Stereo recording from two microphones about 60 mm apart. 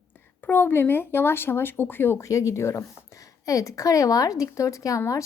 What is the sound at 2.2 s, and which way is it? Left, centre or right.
Speech, left.